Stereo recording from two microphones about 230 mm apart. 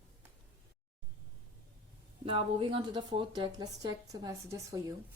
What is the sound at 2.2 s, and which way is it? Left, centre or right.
A woman's voice, right.